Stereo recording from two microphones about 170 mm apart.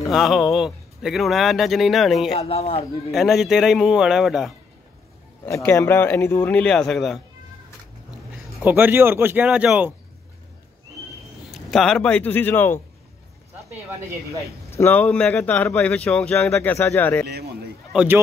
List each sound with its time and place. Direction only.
0.0 s a man's voice: centre (ahead or behind)
2.3 s speech: 35° left (ahead or behind)
3.1 s a man's voice: centre (ahead or behind)
5.4 s speech: 15° left (ahead or behind)
8.6 s speech: 10° right (ahead or behind)
11.5 s speech: centre (ahead or behind)
14.8 s speech: 10° left (ahead or behind)
17.3 s a sound: 70° right (ahead or behind)
17.9 s speech: 10° right (ahead or behind)